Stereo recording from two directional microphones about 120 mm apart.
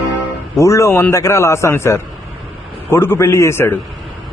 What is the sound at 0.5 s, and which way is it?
A man's voice, 25° left (ahead or behind).